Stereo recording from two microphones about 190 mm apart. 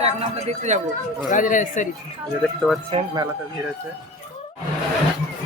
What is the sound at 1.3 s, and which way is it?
Speech, 45° left (ahead or behind).